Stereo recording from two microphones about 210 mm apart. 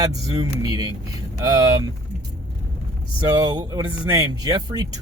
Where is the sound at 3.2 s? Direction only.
20° right (ahead or behind).